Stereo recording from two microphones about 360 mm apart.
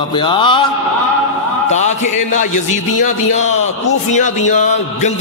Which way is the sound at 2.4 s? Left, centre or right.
Left.